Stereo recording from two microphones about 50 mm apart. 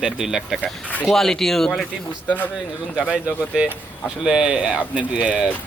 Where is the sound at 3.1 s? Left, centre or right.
Right.